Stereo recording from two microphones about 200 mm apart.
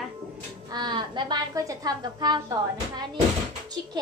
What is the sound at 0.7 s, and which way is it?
A woman's voice, 20° right (ahead or behind).